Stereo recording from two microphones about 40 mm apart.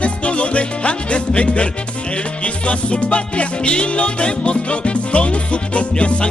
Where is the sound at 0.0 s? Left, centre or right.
Left.